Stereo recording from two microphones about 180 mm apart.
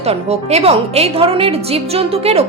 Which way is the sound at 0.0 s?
35° right (ahead or behind).